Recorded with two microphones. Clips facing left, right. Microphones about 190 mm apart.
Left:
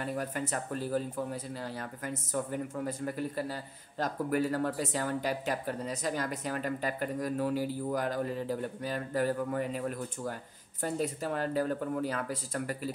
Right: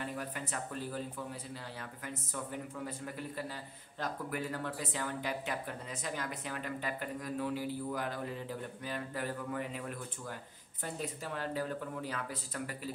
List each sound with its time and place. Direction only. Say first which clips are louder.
0.0 s speech: left 6 dB; 45° left (ahead or behind)